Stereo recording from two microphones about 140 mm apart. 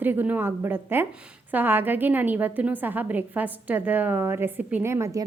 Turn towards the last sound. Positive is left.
turn(degrees=-20)  # may be behind; listen again after turning